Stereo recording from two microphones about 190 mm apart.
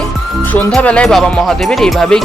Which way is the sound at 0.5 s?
5° left (ahead or behind).